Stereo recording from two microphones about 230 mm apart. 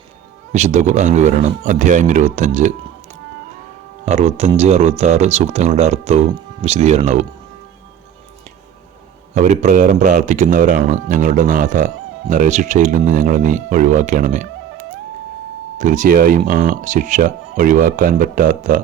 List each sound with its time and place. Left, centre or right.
0.5 s speech: right
9.3 s speech: right
15.8 s speech: right